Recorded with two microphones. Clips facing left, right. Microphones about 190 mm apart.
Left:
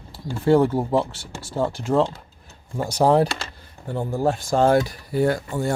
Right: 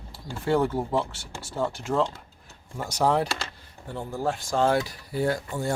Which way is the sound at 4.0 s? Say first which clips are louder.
Left 6 dB; 50° left (ahead or behind).